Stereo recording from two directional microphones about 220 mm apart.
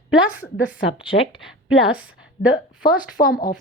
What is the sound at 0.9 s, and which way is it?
Speech, 25° left (ahead or behind).